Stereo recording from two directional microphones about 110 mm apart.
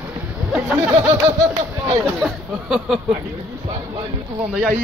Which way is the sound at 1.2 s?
40° right (ahead or behind).